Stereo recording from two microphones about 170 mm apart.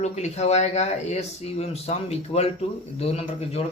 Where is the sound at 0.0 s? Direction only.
40° left (ahead or behind).